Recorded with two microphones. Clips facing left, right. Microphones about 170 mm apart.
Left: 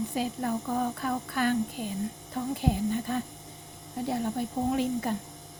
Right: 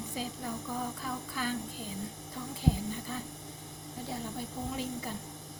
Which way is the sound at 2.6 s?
65° left (ahead or behind).